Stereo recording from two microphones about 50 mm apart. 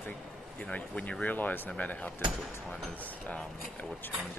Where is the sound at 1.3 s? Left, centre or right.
Left.